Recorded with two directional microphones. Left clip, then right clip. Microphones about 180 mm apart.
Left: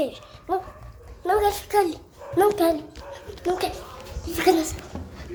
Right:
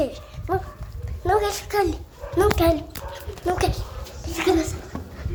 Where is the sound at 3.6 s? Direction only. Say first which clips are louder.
Right 3 dB; 20° right (ahead or behind).